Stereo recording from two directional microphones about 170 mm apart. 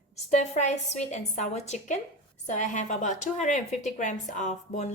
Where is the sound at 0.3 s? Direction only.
45° left (ahead or behind).